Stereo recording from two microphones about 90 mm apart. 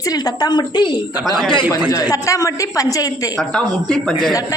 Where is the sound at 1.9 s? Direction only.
35° left (ahead or behind).